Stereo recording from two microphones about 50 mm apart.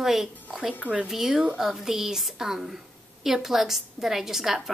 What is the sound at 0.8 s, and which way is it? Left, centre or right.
Speech, right.